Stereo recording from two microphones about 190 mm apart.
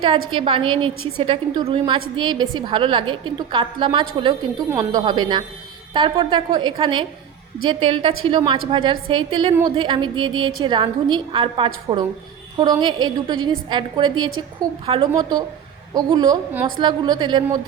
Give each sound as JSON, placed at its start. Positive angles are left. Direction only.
{"t": 0.3, "sound": "a woman's voice", "side_deg": -25}